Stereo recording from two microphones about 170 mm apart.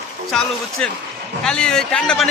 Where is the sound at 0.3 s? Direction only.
5° left (ahead or behind).